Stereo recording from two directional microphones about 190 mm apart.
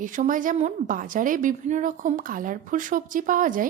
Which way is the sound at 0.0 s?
45° right (ahead or behind).